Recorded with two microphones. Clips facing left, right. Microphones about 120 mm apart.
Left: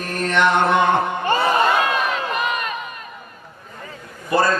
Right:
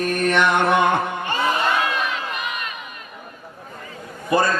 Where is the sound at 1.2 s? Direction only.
35° left (ahead or behind).